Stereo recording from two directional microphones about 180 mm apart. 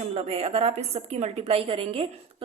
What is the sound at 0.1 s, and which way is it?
A woman's voice, 35° right (ahead or behind).